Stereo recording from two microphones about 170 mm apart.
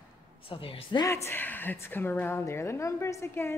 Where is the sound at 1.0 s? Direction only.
15° left (ahead or behind).